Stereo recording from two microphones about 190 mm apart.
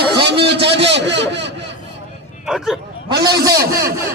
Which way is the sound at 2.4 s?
Centre (ahead or behind).